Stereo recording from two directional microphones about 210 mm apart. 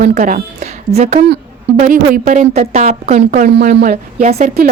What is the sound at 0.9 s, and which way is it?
A woman's voice, 30° right (ahead or behind).